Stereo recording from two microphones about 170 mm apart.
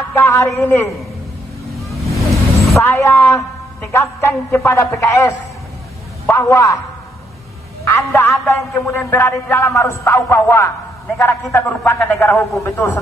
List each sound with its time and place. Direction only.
0.1 s a woman's voice: 15° left (ahead or behind)
1.7 s vehicle: centre (ahead or behind)
2.8 s a man's voice: 15° left (ahead or behind)
7.8 s a man's voice: 15° left (ahead or behind)